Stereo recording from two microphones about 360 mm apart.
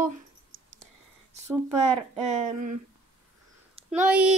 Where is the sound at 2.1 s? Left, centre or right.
Centre.